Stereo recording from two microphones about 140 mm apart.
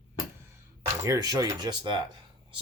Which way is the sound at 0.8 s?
25° right (ahead or behind).